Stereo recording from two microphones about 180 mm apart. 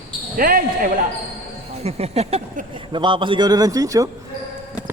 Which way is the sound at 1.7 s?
35° right (ahead or behind).